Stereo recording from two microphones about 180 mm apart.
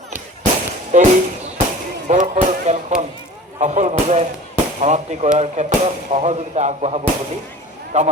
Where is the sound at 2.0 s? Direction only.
40° right (ahead or behind).